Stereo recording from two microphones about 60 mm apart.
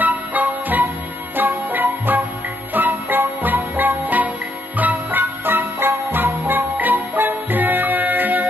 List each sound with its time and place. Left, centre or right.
0.0 s music: right